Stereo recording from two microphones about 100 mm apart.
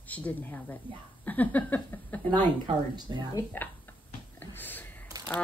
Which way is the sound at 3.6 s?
20° left (ahead or behind).